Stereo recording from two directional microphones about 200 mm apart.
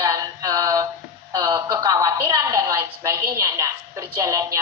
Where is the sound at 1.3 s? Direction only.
15° right (ahead or behind).